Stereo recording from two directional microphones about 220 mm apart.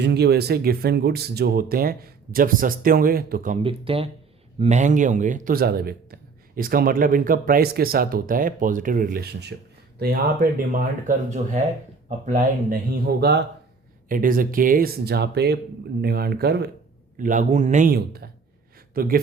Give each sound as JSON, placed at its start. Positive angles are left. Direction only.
{"t": 0.0, "sound": "speech", "side_deg": -50}
{"t": 3.6, "sound": "speech", "side_deg": -25}
{"t": 17.2, "sound": "speech", "side_deg": -35}